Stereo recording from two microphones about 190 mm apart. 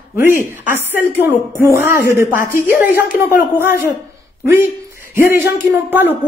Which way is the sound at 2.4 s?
45° left (ahead or behind).